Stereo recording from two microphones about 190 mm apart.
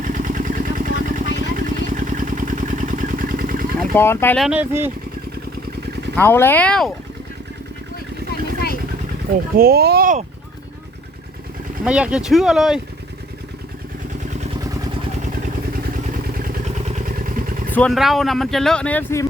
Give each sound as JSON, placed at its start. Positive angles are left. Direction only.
{"t": 0.0, "sound": "vehicle", "side_deg": -45}
{"t": 3.9, "sound": "speech", "side_deg": 10}
{"t": 4.4, "sound": "speech", "side_deg": -5}
{"t": 6.1, "sound": "speech", "side_deg": 10}
{"t": 9.6, "sound": "speech", "side_deg": -55}
{"t": 11.9, "sound": "speech", "side_deg": -5}
{"t": 16.4, "sound": "vehicle", "side_deg": -45}
{"t": 17.7, "sound": "speech", "side_deg": 0}